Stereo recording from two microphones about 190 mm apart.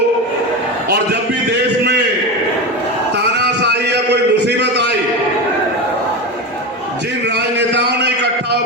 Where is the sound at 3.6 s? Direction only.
60° right (ahead or behind).